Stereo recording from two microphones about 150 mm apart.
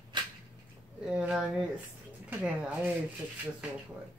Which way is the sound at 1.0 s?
5° right (ahead or behind).